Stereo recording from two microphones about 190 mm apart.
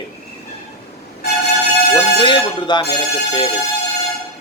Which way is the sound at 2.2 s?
25° left (ahead or behind).